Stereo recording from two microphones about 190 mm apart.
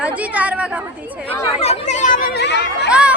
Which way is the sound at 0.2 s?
5° right (ahead or behind).